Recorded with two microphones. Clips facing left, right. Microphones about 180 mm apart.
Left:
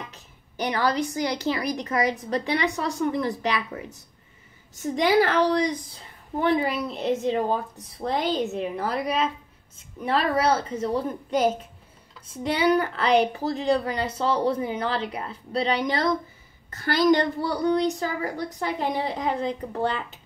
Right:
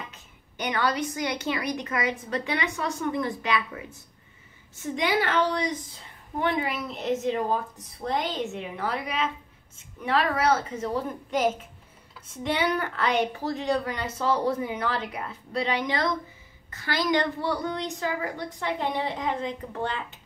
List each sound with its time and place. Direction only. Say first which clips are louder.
0.1 s a woman's voice: left 2 dB; 35° left (ahead or behind)
4.8 s a woman's voice: left 5 dB; 35° left (ahead or behind)